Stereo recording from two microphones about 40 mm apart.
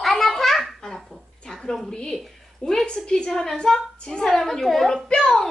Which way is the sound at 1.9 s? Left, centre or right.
Left.